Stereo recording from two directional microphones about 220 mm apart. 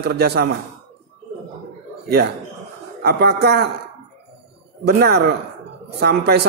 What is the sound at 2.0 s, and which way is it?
A man's voice, 45° right (ahead or behind).